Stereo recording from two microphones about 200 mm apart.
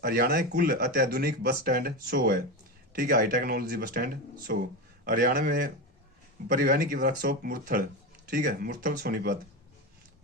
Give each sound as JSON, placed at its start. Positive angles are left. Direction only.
{"t": 0.0, "sound": "speech", "side_deg": -50}